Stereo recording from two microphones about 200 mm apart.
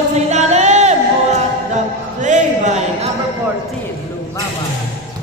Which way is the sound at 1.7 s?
40° right (ahead or behind).